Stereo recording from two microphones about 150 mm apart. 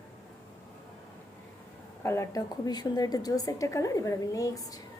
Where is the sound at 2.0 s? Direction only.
20° left (ahead or behind).